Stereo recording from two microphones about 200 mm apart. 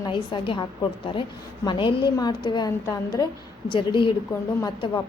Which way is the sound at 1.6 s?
25° left (ahead or behind).